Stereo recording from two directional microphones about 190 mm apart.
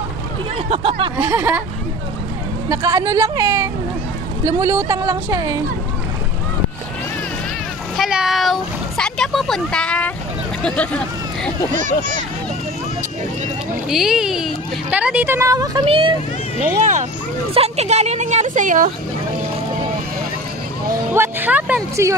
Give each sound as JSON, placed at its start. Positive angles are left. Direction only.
{"t": 0.7, "sound": "speech", "side_deg": -30}
{"t": 1.1, "sound": "speech", "side_deg": -10}
{"t": 2.7, "sound": "speech", "side_deg": -15}
{"t": 8.0, "sound": "speech", "side_deg": -5}
{"t": 11.7, "sound": "a woman's voice", "side_deg": -40}
{"t": 13.8, "sound": "speech", "side_deg": 0}
{"t": 17.6, "sound": "a woman's voice", "side_deg": -35}
{"t": 21.1, "sound": "speech", "side_deg": -10}